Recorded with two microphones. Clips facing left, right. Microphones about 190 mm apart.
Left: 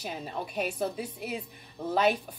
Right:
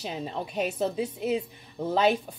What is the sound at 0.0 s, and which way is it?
Speech, 25° right (ahead or behind).